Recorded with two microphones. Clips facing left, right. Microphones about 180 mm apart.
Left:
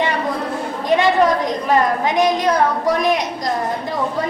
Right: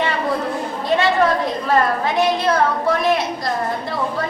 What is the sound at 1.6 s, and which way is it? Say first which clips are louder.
A woman's voice: left 1 dB; 15° left (ahead or behind).